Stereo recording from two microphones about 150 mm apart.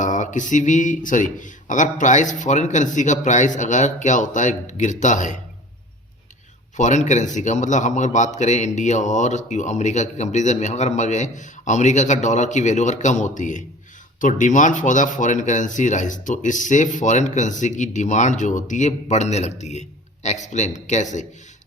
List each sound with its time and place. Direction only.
0.0 s speech: 55° left (ahead or behind)
6.7 s a man's voice: 55° left (ahead or behind)